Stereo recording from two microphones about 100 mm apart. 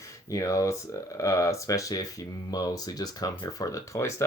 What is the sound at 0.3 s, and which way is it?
Speech, 35° left (ahead or behind).